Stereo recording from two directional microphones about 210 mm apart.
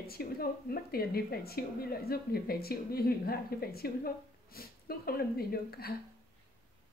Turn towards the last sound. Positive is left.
turn(degrees=45)  # may be behind; listen again after turning